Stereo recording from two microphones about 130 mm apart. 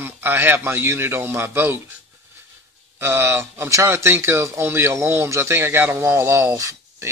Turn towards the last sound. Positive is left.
turn(degrees=-20)  # may be behind; listen again after turning